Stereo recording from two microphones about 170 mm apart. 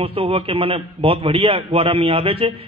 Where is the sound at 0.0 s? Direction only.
30° right (ahead or behind).